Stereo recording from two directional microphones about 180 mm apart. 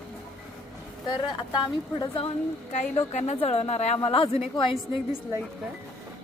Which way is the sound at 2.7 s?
40° left (ahead or behind).